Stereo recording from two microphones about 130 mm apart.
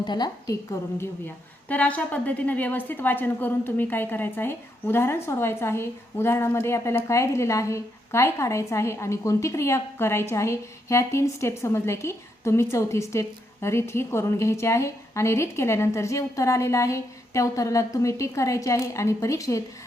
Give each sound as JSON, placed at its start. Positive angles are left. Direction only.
{"t": 0.0, "sound": "a woman's voice", "side_deg": 35}
{"t": 1.6, "sound": "a woman's voice", "side_deg": 10}